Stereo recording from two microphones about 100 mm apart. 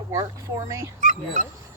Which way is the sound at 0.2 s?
30° right (ahead or behind).